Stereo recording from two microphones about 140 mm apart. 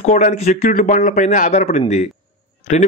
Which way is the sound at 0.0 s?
55° left (ahead or behind).